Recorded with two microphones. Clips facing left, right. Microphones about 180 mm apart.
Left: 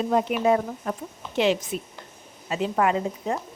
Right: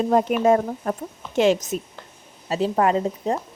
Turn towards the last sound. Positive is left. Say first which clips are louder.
# right 3 dB
turn(degrees=-35)  # may be behind; listen again after turning